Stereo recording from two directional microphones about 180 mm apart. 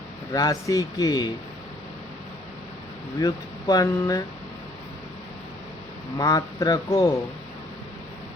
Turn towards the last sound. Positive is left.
turn(degrees=15)  # may be behind; listen again after turning